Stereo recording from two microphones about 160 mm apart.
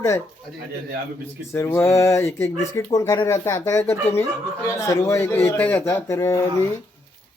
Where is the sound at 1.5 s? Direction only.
15° left (ahead or behind).